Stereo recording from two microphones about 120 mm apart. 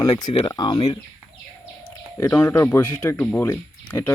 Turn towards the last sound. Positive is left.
turn(degrees=20)  # may be behind; listen again after turning